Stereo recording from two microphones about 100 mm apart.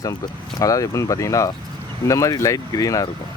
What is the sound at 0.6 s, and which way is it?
Speech, 35° left (ahead or behind).